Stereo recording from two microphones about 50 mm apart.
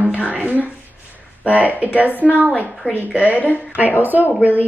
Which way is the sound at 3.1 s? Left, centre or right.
Right.